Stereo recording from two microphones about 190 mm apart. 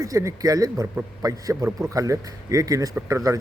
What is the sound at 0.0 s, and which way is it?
Speech, 15° right (ahead or behind).